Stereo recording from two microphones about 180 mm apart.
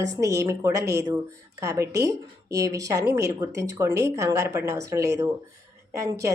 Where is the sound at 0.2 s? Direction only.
15° right (ahead or behind).